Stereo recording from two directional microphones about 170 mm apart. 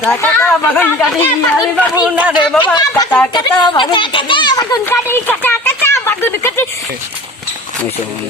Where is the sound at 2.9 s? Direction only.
10° left (ahead or behind).